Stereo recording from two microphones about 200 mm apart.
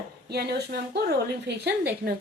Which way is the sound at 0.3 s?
55° right (ahead or behind).